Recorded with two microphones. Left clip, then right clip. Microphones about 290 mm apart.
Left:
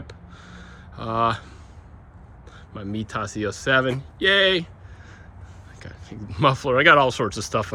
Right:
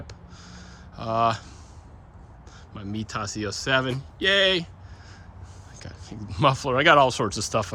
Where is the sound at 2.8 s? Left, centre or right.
Centre.